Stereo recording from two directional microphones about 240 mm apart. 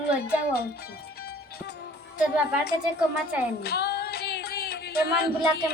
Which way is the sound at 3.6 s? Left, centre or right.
Left.